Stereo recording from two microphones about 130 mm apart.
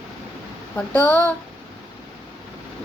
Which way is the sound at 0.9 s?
15° left (ahead or behind).